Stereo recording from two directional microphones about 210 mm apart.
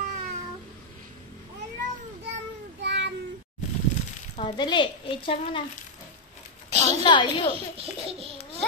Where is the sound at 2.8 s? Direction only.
55° right (ahead or behind).